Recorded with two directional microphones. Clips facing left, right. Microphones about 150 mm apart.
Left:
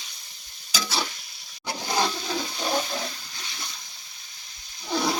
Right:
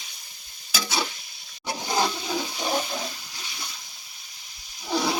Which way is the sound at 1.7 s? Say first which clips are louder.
Right 1 dB; 10° right (ahead or behind).